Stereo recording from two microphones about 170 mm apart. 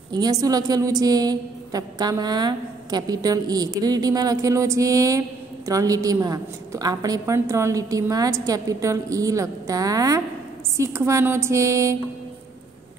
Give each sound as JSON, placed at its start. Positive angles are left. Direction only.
{"t": 0.1, "sound": "a woman's voice", "side_deg": -20}